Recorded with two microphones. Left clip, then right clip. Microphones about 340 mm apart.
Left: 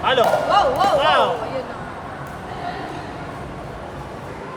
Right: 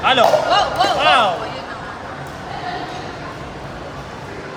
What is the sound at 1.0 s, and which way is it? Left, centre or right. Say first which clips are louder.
Basketball bounce: right 5 dB; centre.